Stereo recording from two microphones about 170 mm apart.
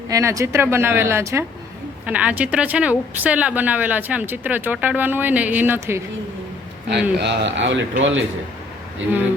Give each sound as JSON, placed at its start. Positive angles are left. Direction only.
{"t": 0.1, "sound": "a woman's voice", "side_deg": -20}
{"t": 7.2, "sound": "a man's voice", "side_deg": -90}